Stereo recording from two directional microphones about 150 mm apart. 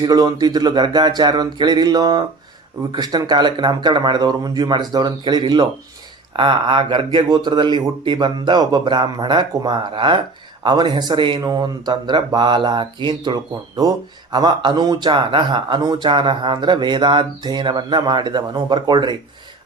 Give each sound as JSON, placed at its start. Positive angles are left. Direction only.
{"t": 0.0, "sound": "speech", "side_deg": -25}